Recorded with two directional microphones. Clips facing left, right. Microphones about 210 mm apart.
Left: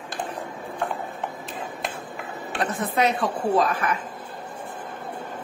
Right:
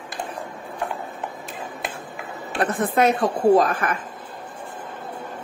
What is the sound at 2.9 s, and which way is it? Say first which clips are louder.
Speech: right 4 dB; 45° right (ahead or behind).